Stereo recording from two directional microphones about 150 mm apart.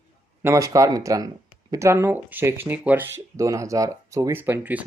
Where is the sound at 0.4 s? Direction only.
20° right (ahead or behind).